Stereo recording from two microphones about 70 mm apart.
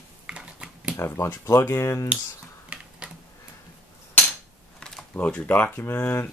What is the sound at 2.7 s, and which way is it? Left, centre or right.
Typing, centre.